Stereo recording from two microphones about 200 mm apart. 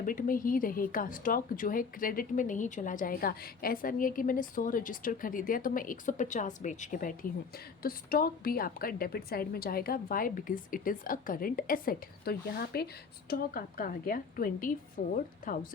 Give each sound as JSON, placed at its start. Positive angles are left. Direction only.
{"t": 0.0, "sound": "a woman's voice", "side_deg": 45}